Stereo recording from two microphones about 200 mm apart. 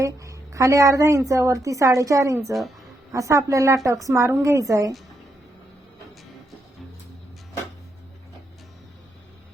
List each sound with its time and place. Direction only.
0.0 s a woman's voice: 15° right (ahead or behind)